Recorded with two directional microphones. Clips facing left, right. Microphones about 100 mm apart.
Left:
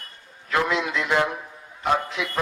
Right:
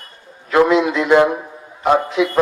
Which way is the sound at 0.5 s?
15° right (ahead or behind).